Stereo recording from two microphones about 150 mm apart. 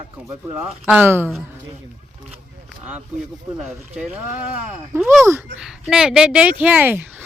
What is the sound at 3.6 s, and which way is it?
Speech, centre (ahead or behind).